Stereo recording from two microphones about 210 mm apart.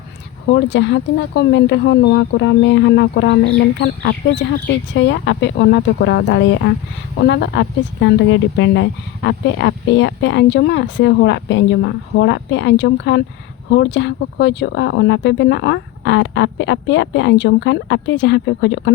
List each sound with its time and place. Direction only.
0.5 s speech: 60° left (ahead or behind)